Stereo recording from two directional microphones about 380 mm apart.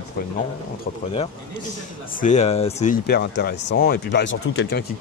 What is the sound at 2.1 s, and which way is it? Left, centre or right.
Speech, centre.